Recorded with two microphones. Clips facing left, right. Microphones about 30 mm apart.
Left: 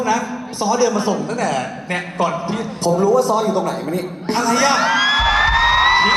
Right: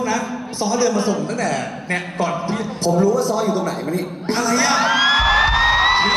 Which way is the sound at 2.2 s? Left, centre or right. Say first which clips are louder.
Left 3 dB; centre.